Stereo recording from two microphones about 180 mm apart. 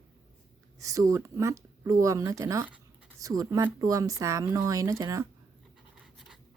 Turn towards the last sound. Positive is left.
turn(degrees=-5)  # may be behind; listen again after turning